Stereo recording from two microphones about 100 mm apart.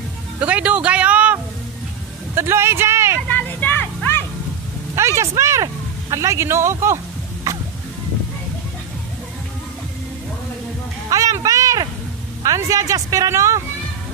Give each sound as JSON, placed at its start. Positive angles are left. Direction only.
{"t": 0.4, "sound": "a sound", "side_deg": -15}
{"t": 2.3, "sound": "a man's voice", "side_deg": -25}
{"t": 3.3, "sound": "vehicle", "side_deg": 15}
{"t": 4.9, "sound": "a man's voice", "side_deg": -30}
{"t": 11.1, "sound": "a sound", "side_deg": -35}
{"t": 12.4, "sound": "speech", "side_deg": -35}